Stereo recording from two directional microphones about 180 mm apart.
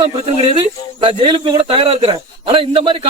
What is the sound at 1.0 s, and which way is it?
A man's voice, 30° right (ahead or behind).